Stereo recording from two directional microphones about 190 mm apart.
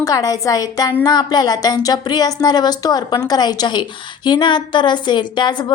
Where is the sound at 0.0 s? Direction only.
20° left (ahead or behind).